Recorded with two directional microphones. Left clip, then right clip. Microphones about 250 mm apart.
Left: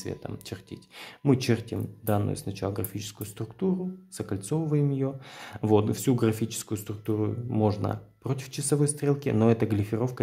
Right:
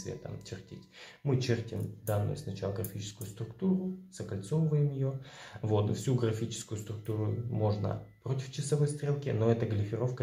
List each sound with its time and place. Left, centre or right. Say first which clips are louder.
0.0 s speech: left 5 dB; left